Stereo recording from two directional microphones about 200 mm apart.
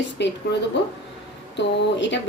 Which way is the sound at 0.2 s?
60° left (ahead or behind).